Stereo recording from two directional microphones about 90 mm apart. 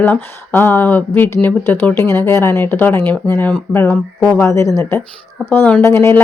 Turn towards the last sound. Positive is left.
turn(degrees=30)  # may be behind; listen again after turning